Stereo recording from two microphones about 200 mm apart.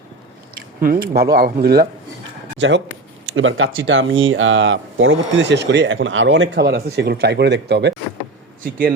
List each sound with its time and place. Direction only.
0.8 s speech: 45° right (ahead or behind)
2.6 s speech: 65° right (ahead or behind)
3.2 s speech: 85° right; by 7.9 s 55° right (ahead or behind)